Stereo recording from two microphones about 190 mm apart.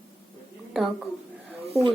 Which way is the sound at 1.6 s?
30° right (ahead or behind).